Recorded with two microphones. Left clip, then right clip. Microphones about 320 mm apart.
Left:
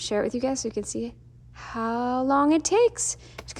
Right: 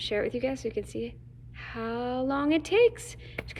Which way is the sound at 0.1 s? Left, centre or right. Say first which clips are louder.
Left 4 dB; centre.